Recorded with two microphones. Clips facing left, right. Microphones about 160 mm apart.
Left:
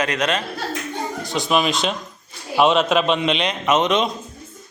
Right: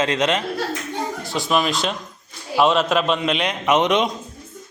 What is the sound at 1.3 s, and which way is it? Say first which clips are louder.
Speech: left 1 dB; centre (ahead or behind).